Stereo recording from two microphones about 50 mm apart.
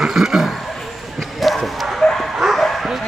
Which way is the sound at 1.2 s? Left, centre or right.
Centre.